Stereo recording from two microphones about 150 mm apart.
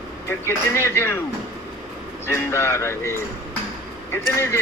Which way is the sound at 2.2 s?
15° left (ahead or behind).